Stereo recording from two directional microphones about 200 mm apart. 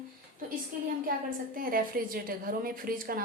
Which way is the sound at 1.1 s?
45° right (ahead or behind).